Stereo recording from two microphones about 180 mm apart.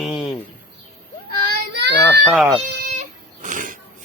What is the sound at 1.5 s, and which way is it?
Child singing, 70° right (ahead or behind).